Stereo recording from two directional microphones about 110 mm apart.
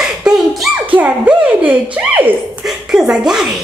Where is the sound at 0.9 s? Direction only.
15° right (ahead or behind).